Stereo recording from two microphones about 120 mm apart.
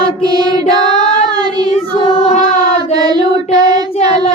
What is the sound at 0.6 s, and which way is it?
Child singing, 70° left (ahead or behind).